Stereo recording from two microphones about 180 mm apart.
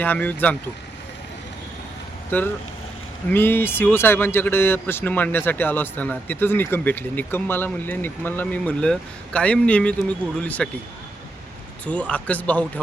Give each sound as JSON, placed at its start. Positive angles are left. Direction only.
{"t": 0.0, "sound": "speech", "side_deg": 10}
{"t": 2.3, "sound": "speech", "side_deg": 10}
{"t": 11.9, "sound": "speech", "side_deg": 5}